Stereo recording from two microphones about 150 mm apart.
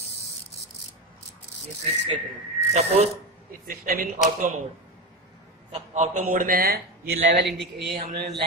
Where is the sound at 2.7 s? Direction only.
45° right (ahead or behind).